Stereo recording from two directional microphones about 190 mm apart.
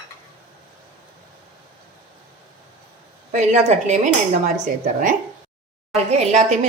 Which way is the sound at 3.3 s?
35° right (ahead or behind).